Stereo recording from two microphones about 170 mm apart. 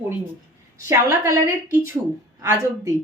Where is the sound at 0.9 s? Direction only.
15° right (ahead or behind).